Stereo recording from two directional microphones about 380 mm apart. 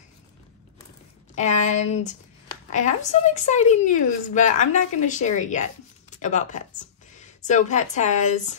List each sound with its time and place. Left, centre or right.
1.3 s speech: centre